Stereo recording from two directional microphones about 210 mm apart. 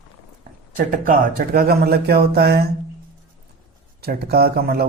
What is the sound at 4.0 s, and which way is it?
Speech, 50° right (ahead or behind).